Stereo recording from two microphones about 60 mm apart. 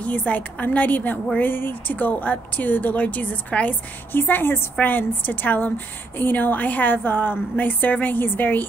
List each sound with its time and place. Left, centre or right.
0.0 s speech: left
4.1 s a woman's voice: left